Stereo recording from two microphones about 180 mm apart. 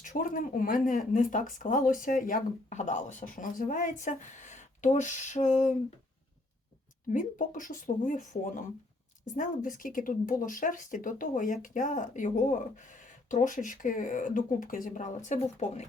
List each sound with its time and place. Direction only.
0.0 s speech: 45° left (ahead or behind)
7.1 s speech: 45° left (ahead or behind)